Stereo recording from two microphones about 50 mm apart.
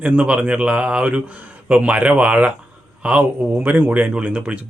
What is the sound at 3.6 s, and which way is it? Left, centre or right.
Speech, right.